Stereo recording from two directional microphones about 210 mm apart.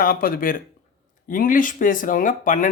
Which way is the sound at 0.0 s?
45° left (ahead or behind).